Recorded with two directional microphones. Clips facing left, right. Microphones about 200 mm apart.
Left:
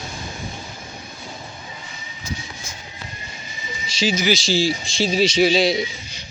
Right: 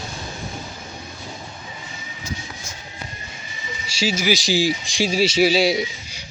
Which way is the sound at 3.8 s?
10° right (ahead or behind).